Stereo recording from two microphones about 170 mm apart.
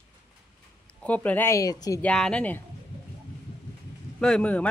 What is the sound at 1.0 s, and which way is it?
Speech, 10° left (ahead or behind).